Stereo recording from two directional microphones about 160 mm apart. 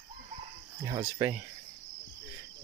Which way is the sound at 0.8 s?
20° right (ahead or behind).